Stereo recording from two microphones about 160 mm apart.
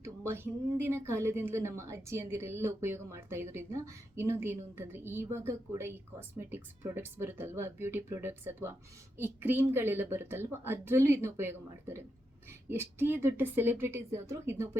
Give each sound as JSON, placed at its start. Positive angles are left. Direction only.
{"t": 0.0, "sound": "a woman's voice", "side_deg": -15}